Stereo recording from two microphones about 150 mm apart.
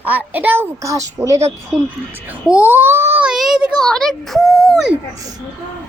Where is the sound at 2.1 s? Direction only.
10° right (ahead or behind).